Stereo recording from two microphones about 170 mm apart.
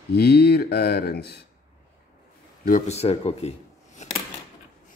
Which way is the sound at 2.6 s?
55° left (ahead or behind).